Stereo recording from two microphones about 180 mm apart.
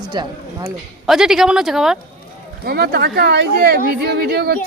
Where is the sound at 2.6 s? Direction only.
60° right (ahead or behind).